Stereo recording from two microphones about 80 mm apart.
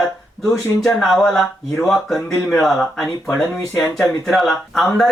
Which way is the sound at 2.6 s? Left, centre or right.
Centre.